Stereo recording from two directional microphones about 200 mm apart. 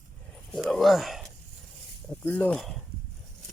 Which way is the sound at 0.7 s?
Centre (ahead or behind).